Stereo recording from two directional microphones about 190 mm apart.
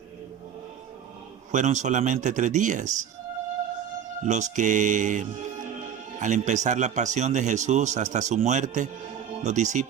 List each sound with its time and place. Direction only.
1.5 s speech: 40° right (ahead or behind)
4.2 s speech: 40° right (ahead or behind)